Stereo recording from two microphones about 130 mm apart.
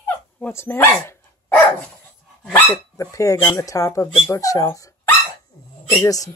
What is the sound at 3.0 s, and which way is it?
Speech, 25° left (ahead or behind).